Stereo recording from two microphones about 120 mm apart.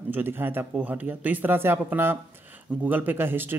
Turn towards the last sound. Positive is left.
turn(degrees=-15)  # may be behind; listen again after turning